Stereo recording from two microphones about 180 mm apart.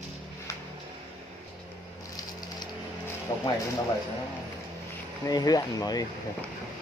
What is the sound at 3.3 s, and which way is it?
Music, 25° left (ahead or behind).